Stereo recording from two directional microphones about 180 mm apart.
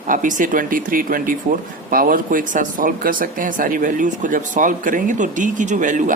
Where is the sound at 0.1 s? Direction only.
45° right (ahead or behind).